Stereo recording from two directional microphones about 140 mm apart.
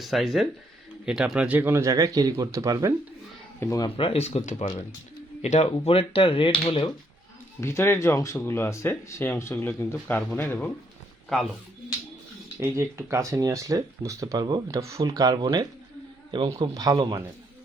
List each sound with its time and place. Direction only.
0.0 s speech: centre (ahead or behind); by 2.9 s 20° right (ahead or behind)
3.6 s speech: 20° left (ahead or behind)
3.8 s speech: 40° left (ahead or behind); by 4.8 s 65° left (ahead or behind)
5.4 s speech: 50° left (ahead or behind)
7.6 s speech: 20° left (ahead or behind)
11.3 s speech: centre (ahead or behind)
12.5 s speech: 20° right (ahead or behind)